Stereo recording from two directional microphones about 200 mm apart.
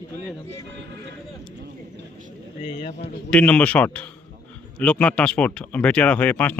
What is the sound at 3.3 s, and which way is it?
Speech, 5° left (ahead or behind).